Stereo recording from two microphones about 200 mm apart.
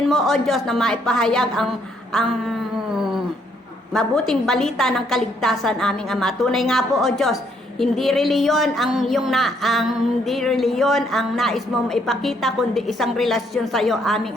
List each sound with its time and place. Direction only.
0.1 s speech: centre (ahead or behind)
3.9 s speech: centre (ahead or behind)